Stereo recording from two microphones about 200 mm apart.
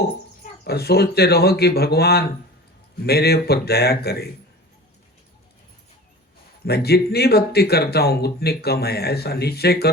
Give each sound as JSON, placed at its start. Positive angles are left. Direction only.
{"t": 0.6, "sound": "speech", "side_deg": 55}
{"t": 6.7, "sound": "speech", "side_deg": 50}